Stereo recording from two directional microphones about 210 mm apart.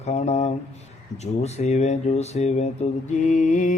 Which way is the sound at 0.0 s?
30° left (ahead or behind).